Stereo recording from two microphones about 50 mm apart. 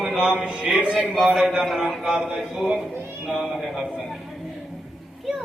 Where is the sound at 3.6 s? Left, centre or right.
Centre.